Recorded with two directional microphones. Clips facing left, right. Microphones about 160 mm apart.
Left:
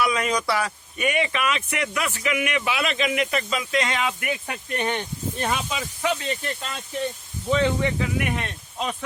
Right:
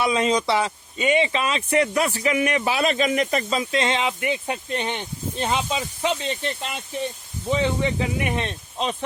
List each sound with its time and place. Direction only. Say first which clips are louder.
0.0 s speech: right 3 dB; 25° right (ahead or behind)